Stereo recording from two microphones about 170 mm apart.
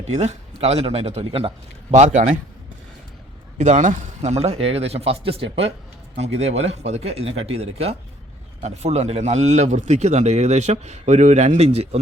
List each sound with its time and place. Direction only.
0.1 s a man's voice: 40° right (ahead or behind)
3.6 s a man's voice: 45° right (ahead or behind)